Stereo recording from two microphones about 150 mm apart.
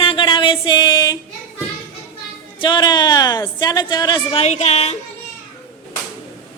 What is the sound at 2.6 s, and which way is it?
A woman's voice, 30° left (ahead or behind).